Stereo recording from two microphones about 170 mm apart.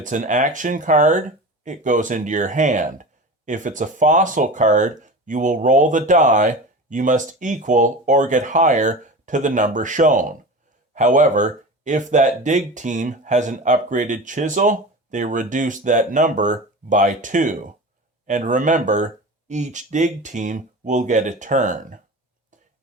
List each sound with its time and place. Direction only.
0.0 s speech: 50° right (ahead or behind)